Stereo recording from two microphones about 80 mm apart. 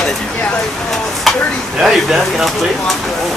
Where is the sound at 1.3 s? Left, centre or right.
Centre.